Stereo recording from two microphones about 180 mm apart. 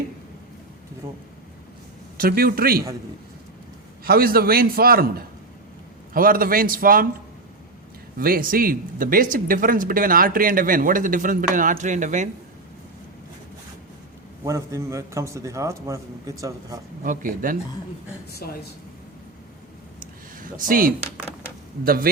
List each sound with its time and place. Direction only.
1.0 s a man's voice: 15° right (ahead or behind)
2.1 s a man's voice: 55° right (ahead or behind)
4.0 s a man's voice: 55° right (ahead or behind)
8.2 s speech: 55° right (ahead or behind)
14.4 s a man's voice: 15° right (ahead or behind)
17.0 s speech: 50° right (ahead or behind)
18.4 s speech: 60° left (ahead or behind)
20.4 s speech: 50° right (ahead or behind)